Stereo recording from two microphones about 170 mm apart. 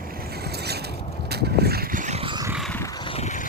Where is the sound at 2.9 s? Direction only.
35° left (ahead or behind).